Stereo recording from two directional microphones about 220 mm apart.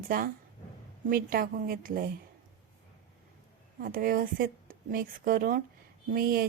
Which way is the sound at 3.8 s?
40° right (ahead or behind).